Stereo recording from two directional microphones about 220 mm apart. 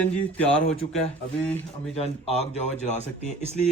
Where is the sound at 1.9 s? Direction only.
30° left (ahead or behind).